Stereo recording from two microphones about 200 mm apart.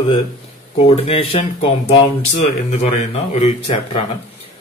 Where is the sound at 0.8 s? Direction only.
30° left (ahead or behind).